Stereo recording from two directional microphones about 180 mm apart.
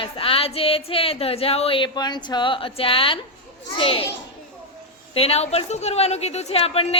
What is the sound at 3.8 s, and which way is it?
Speech, 30° left (ahead or behind).